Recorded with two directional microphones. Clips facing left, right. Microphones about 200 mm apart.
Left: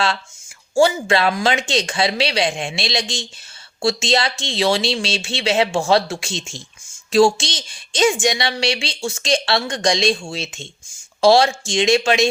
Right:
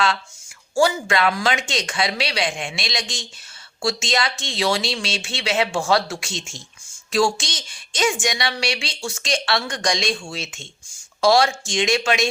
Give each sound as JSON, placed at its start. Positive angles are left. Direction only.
{"t": 0.8, "sound": "a woman's voice", "side_deg": 25}